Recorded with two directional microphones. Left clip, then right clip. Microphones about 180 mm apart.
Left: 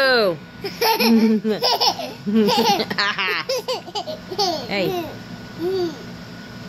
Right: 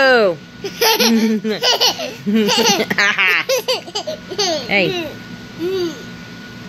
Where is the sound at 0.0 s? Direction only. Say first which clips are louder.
Right 5 dB; 20° right (ahead or behind).